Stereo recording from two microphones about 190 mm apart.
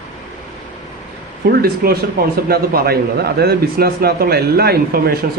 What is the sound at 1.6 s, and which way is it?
Speech, 50° right (ahead or behind).